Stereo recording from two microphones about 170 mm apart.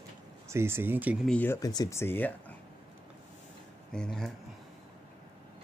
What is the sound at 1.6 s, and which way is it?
Speech, 20° left (ahead or behind).